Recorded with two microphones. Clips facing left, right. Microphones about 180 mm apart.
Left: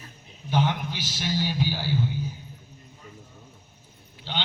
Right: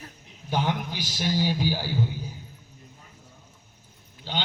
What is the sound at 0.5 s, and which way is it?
A man's voice, 45° right (ahead or behind).